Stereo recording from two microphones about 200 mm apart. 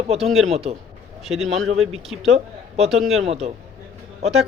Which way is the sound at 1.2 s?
Centre (ahead or behind).